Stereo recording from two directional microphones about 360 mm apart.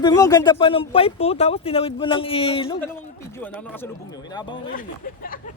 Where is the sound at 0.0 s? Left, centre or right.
Centre.